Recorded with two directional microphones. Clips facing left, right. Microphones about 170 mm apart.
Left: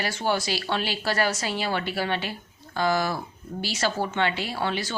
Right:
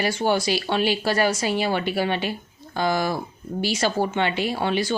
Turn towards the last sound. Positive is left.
turn(degrees=-15)  # may be behind; listen again after turning